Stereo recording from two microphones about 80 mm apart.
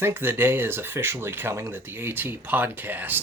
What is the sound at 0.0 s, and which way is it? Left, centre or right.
Speech, right.